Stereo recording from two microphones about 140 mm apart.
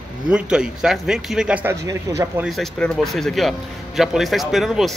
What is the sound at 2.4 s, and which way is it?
Speech, centre (ahead or behind).